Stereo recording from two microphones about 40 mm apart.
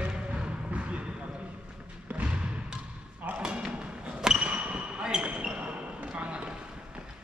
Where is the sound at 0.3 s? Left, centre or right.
Right.